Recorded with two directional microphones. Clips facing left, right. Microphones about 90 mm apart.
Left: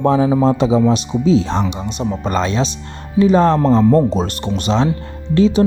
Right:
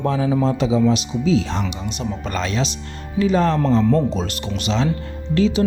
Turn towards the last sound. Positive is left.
turn(degrees=40)  # may be behind; listen again after turning